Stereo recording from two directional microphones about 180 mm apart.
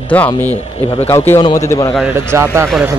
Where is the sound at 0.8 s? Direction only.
30° left (ahead or behind).